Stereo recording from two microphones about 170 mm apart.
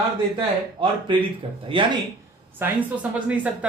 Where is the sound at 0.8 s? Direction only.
30° right (ahead or behind).